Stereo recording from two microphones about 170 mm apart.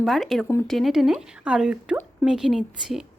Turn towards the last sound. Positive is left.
turn(degrees=0)  # may be behind; listen again after turning